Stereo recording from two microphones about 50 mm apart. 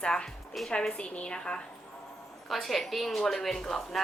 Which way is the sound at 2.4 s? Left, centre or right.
Centre.